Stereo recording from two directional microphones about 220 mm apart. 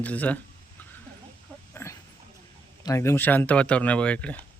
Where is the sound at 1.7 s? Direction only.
10° left (ahead or behind).